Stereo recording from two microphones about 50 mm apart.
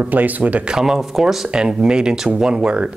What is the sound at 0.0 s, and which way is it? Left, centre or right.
Speech, right.